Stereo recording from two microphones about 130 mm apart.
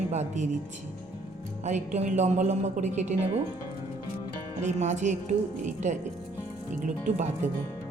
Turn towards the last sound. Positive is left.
turn(degrees=-65)  # may be behind; listen again after turning